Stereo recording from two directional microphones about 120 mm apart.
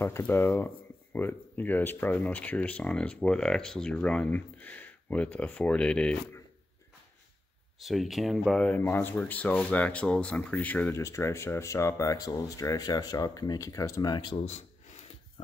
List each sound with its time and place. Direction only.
0.0 s speech: 20° left (ahead or behind)
7.8 s speech: centre (ahead or behind)
8.8 s speech: 20° left (ahead or behind)
11.0 s speech: 25° left (ahead or behind)
14.3 s a sound: 60° left (ahead or behind)